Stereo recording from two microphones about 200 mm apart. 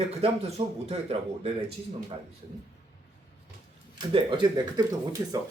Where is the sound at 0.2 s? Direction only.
30° right (ahead or behind).